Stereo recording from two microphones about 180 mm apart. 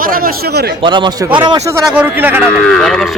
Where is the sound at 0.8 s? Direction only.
25° right (ahead or behind).